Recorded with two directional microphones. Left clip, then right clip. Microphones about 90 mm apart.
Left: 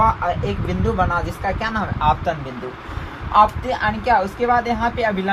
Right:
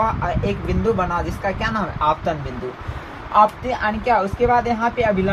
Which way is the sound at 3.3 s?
55° right (ahead or behind).